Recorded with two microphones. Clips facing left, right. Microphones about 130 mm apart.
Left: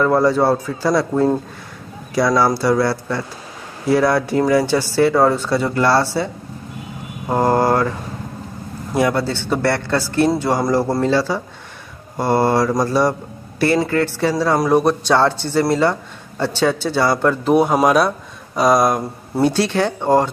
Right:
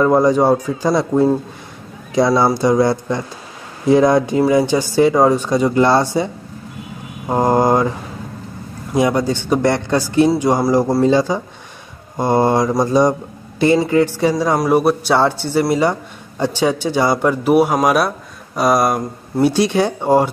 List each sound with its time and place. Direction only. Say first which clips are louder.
0.0 s speech: right 2 dB; 15° right (ahead or behind)
8.9 s speech: right 2 dB; 15° right (ahead or behind); by 19.5 s centre (ahead or behind)
19.5 s speech: right 2 dB; 15° right (ahead or behind)